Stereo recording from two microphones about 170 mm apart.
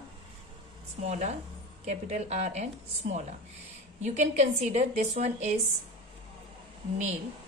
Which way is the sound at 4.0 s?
45° right (ahead or behind).